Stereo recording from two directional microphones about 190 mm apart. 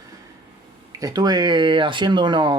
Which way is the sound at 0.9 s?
20° right (ahead or behind).